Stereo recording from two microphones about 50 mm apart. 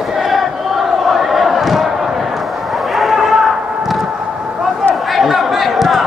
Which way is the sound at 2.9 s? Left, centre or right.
Centre.